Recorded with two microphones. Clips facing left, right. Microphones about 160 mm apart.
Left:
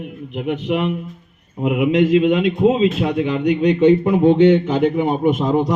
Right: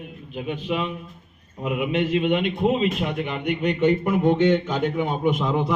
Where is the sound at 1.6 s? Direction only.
80° left.